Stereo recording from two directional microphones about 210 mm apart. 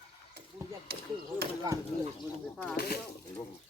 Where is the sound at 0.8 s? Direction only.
50° right (ahead or behind).